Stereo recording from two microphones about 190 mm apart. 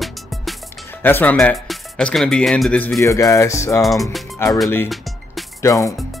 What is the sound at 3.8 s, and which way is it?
Speech, centre (ahead or behind).